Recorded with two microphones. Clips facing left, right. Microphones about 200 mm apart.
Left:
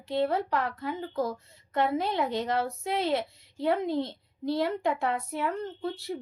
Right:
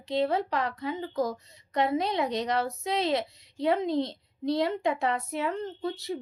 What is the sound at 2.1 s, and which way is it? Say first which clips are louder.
Speech: even; 20° right (ahead or behind).